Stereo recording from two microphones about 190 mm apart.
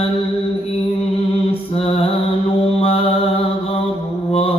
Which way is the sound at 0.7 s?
30° left (ahead or behind).